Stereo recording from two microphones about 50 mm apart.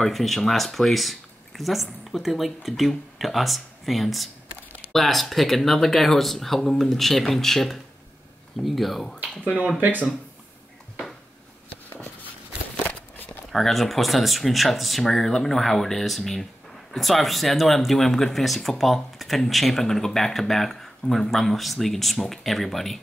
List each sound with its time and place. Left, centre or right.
0.0 s speech: centre
9.8 s speech: right
12.8 s a sound: left
13.5 s speech: centre